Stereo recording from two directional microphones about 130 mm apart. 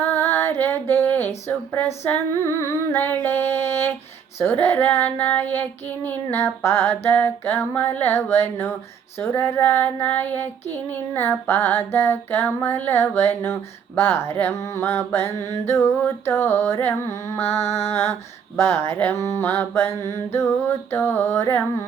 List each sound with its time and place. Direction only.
0.0 s female singing: 15° left (ahead or behind)
2.4 s speech: 20° left (ahead or behind)
4.6 s child singing: 15° left (ahead or behind)
12.3 s speech: 20° left (ahead or behind)